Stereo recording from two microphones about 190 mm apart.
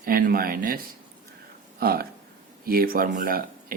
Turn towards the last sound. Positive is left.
turn(degrees=-50)  # may be behind; listen again after turning